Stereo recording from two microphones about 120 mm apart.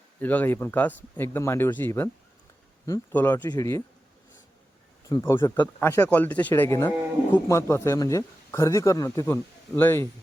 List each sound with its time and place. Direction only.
0.2 s speech: 15° left (ahead or behind)
3.1 s speech: 15° left (ahead or behind)
3.5 s speech: 25° left (ahead or behind)
5.2 s speech: 20° left (ahead or behind)